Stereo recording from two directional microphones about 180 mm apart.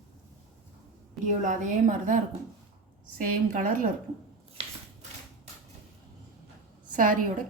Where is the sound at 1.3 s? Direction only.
45° right (ahead or behind).